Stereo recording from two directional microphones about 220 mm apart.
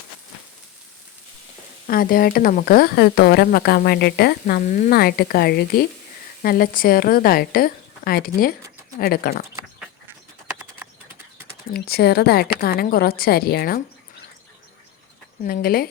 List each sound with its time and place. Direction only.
1.9 s a woman's voice: 40° left (ahead or behind)
11.7 s speech: 45° left (ahead or behind)
15.4 s a woman's voice: 40° left (ahead or behind)